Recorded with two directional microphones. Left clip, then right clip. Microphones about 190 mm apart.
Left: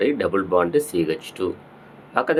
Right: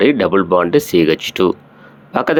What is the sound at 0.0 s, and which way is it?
Speech, 35° right (ahead or behind).